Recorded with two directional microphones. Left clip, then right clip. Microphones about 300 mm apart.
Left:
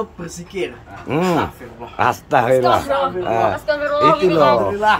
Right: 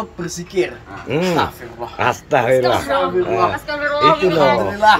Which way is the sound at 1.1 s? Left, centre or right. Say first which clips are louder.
Right 1 dB; centre.